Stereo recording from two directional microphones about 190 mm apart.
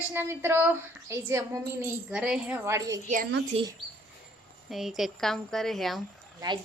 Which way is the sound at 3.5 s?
30° right (ahead or behind).